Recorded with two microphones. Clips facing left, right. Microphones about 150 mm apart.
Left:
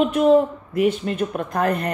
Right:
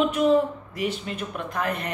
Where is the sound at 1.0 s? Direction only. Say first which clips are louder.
Left 8 dB; 45° left (ahead or behind).